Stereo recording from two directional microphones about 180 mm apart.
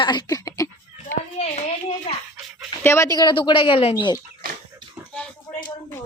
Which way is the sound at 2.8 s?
15° left (ahead or behind).